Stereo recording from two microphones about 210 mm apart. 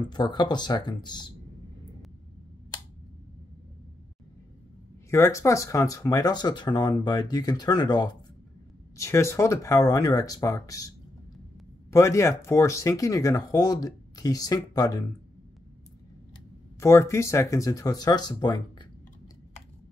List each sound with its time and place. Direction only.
0.1 s speech: 20° left (ahead or behind)
5.1 s speech: 15° left (ahead or behind)
11.9 s speech: 15° left (ahead or behind)
16.8 s speech: 15° left (ahead or behind)